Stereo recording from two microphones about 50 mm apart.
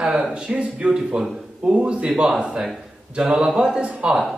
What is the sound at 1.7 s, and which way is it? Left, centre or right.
Speech, right.